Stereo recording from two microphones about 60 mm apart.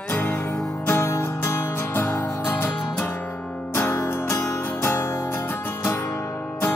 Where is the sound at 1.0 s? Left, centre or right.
Left.